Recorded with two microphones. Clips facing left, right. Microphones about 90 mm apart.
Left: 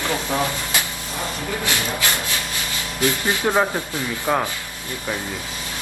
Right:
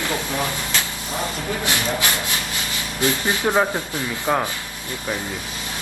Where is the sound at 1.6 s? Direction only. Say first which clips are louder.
Right 1 dB; 20° right (ahead or behind).